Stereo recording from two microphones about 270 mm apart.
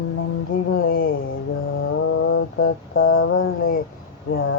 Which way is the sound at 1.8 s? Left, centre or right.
Left.